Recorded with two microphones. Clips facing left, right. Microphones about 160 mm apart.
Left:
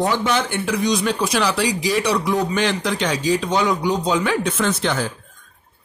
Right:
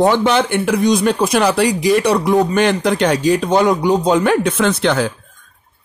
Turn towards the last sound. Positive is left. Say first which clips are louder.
# right 6 dB
turn(degrees=-70)  # may be behind; listen again after turning